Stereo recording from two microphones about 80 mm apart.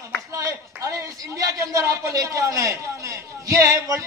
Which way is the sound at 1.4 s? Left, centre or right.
Right.